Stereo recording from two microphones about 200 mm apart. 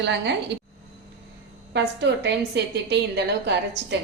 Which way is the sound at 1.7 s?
60° right (ahead or behind).